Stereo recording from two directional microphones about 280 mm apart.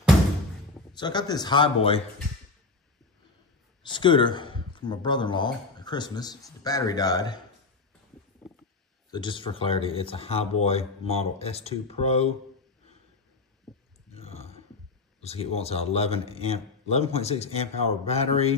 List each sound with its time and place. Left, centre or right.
0.9 s a man's voice: centre
3.8 s a man's voice: centre
9.1 s a man's voice: centre
13.7 s a sound: centre
14.1 s burping: left
15.2 s a man's voice: left